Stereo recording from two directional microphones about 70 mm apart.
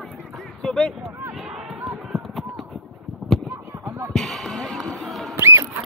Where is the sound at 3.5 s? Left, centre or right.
Right.